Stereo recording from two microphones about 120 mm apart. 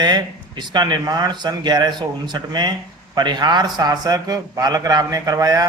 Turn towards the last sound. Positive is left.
turn(degrees=-30)  # may be behind; listen again after turning